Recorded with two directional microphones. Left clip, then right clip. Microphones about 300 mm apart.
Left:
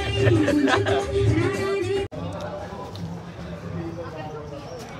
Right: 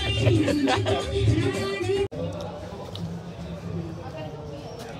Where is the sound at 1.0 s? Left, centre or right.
Centre.